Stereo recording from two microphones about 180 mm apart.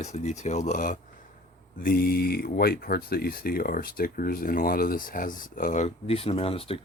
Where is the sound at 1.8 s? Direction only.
55° left (ahead or behind).